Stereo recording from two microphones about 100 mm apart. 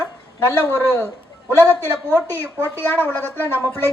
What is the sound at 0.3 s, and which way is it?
A man's voice, 20° left (ahead or behind).